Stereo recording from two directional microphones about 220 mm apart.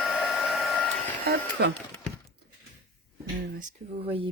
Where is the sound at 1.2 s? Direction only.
50° right (ahead or behind).